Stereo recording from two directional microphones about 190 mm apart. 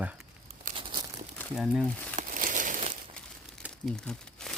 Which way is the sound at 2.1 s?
40° right (ahead or behind).